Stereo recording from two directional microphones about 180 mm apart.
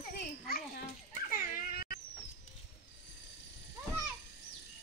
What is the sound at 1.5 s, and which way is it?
Dog, 55° left (ahead or behind).